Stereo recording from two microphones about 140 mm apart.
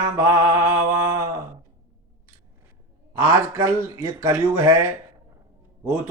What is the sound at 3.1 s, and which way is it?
Speech, 25° right (ahead or behind).